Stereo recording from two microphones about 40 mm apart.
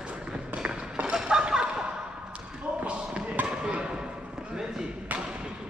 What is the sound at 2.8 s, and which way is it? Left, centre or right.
Basketball bounce, right.